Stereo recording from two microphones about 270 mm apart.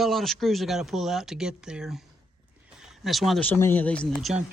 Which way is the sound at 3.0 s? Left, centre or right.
Centre.